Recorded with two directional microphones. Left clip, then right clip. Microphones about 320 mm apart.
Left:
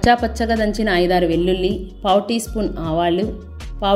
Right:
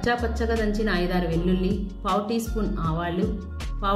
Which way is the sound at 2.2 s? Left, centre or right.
Left.